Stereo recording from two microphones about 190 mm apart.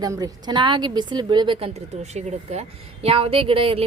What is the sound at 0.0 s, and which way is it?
A woman's voice, 20° right (ahead or behind).